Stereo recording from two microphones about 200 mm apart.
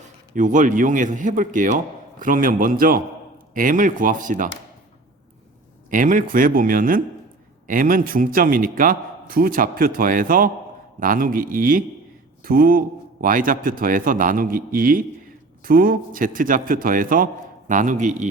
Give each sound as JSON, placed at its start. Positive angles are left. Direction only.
{"t": 0.3, "sound": "a man's voice", "side_deg": -40}
{"t": 5.9, "sound": "a man's voice", "side_deg": -40}